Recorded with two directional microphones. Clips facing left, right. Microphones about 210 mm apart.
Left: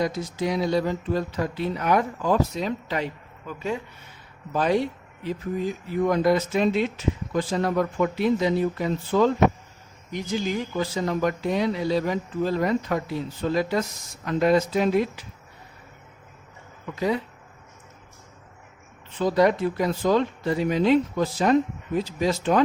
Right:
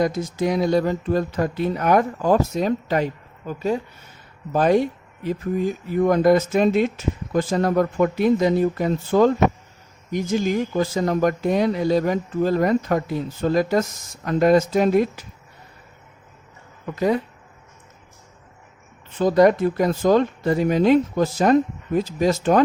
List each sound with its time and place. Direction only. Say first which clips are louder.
0.0 s speech: right 4 dB; 50° right (ahead or behind)
16.9 s speech: right 4 dB; 50° right (ahead or behind)
19.2 s speech: right 5 dB; 45° right (ahead or behind)